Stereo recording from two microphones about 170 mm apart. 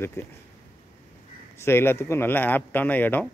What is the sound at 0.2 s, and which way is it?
Speech, 15° left (ahead or behind).